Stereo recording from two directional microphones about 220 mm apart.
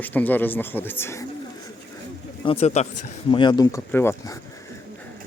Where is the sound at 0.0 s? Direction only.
10° left (ahead or behind).